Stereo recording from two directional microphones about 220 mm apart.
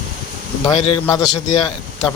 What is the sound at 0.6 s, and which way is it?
Speech, 20° left (ahead or behind).